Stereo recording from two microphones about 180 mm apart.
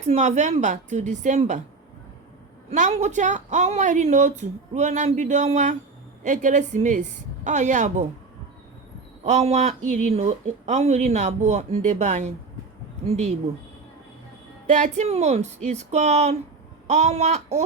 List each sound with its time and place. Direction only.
0.0 s speech: 40° right (ahead or behind)
2.6 s a woman's voice: 40° right (ahead or behind)
9.2 s speech: 40° right (ahead or behind)
14.7 s speech: 40° right (ahead or behind)